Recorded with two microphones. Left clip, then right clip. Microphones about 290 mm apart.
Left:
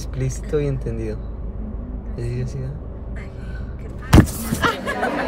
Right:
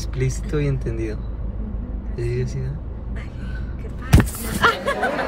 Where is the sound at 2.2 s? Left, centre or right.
Centre.